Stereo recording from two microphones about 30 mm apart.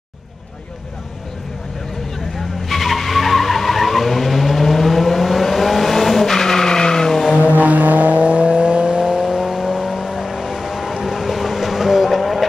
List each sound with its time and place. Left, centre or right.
2.3 s vehicle: centre
6.3 s vehicle: centre
7.5 s vehicle: right; by 12.4 s centre